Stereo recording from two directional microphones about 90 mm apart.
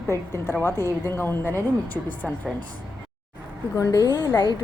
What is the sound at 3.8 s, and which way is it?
Speech, 45° left (ahead or behind).